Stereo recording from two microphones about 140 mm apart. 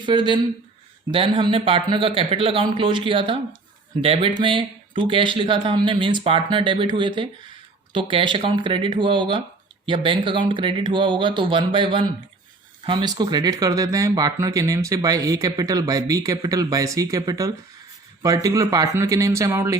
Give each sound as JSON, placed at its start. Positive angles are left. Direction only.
{"t": 0.0, "sound": "speech", "side_deg": -35}